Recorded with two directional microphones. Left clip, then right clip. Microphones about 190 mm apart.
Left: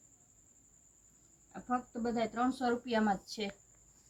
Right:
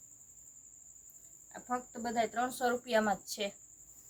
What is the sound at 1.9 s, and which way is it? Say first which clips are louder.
Speech: right 2 dB; 55° right (ahead or behind).